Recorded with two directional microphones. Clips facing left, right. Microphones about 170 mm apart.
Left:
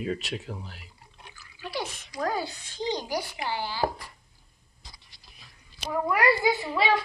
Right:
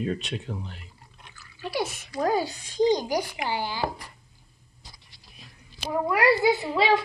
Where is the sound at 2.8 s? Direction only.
40° right (ahead or behind).